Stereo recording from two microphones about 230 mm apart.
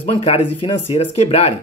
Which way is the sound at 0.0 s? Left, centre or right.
Left.